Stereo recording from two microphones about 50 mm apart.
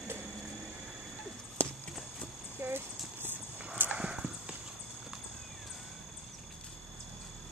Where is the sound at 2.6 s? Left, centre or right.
Right.